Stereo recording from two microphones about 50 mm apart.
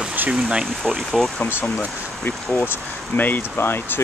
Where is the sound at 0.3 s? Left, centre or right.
Centre.